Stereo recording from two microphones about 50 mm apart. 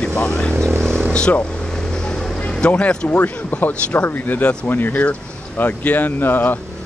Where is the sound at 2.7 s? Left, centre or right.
Left.